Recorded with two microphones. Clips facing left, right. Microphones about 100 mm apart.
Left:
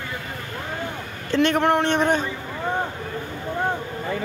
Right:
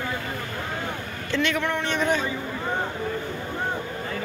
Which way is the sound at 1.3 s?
45° left (ahead or behind).